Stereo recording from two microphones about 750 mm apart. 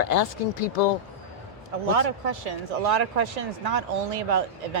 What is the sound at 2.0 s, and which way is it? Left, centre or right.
Speech, right.